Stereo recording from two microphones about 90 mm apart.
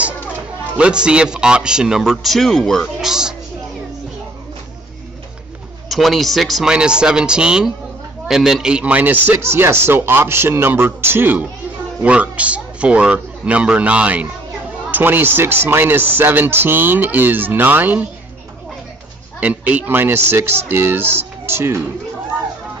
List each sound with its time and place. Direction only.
0.3 s a man's voice: 10° right (ahead or behind); by 3.1 s 5° left (ahead or behind)
3.1 s a man's voice: 5° right (ahead or behind)
5.9 s a man's voice: centre (ahead or behind); by 18.0 s 20° right (ahead or behind)
19.4 s speech: 15° right (ahead or behind)